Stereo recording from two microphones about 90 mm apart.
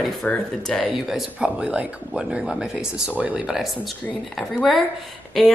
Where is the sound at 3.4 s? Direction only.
5° right (ahead or behind).